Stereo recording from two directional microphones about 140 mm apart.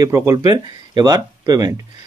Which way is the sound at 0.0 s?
25° right (ahead or behind).